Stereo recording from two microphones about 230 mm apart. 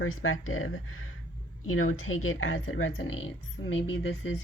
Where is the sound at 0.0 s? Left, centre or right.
Left.